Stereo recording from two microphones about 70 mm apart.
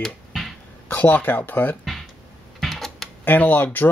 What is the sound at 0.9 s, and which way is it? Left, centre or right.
Speech, left.